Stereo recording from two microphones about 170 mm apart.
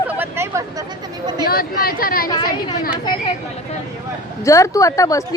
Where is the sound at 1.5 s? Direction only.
60° left (ahead or behind).